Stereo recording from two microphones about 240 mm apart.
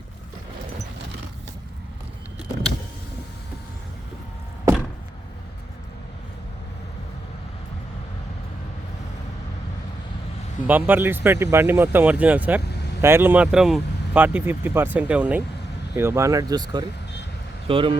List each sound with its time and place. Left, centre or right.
10.7 s speech: centre